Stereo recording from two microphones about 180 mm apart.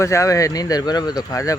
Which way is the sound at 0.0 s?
15° left (ahead or behind).